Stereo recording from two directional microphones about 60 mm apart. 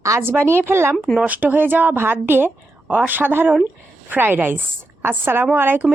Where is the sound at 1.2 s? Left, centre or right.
Right.